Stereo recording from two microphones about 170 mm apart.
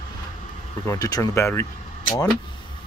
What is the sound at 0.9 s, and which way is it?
Speech, 20° left (ahead or behind).